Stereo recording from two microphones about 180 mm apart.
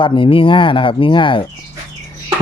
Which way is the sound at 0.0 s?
30° left (ahead or behind).